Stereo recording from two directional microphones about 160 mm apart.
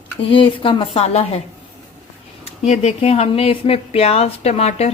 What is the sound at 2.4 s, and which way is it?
Speech, 40° left (ahead or behind).